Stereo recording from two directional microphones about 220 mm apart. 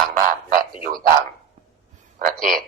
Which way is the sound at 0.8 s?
40° right (ahead or behind).